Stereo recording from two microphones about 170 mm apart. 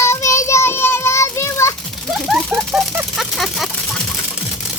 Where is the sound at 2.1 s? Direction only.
Centre (ahead or behind).